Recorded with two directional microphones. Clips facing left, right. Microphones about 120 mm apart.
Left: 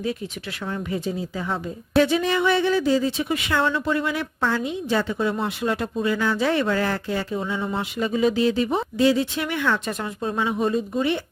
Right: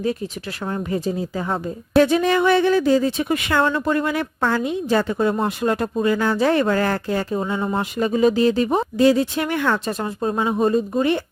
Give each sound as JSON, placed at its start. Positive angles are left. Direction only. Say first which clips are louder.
{"t": 0.7, "sound": "speech", "louder": "right 4 dB", "side_deg": -40}